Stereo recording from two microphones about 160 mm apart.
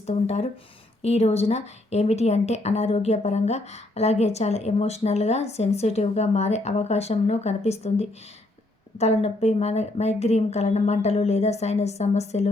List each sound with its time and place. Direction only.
0.0 s speech: 45° left (ahead or behind)